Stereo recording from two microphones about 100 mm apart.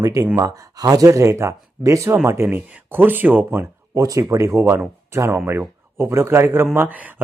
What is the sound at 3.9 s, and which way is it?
Speech, 35° right (ahead or behind).